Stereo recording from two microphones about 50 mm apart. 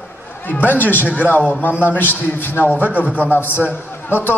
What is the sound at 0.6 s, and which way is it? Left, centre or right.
Speech, left.